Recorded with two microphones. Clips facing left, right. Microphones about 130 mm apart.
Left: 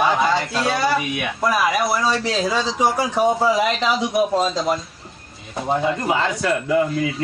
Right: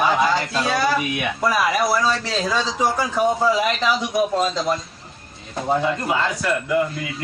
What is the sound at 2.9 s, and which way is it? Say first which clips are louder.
A man's voice: left 1 dB; 20° left (ahead or behind).